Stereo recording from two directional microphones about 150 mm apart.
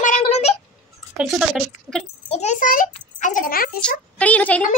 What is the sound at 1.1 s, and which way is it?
Speech, 5° right (ahead or behind).